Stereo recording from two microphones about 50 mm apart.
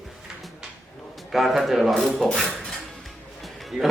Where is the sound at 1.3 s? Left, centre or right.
Centre.